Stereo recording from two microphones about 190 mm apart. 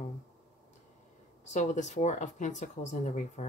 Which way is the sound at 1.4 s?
40° left (ahead or behind).